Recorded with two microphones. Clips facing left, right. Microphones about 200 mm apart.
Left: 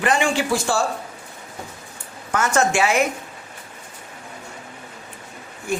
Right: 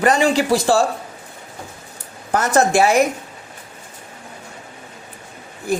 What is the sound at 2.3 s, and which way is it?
Speech, 35° right (ahead or behind).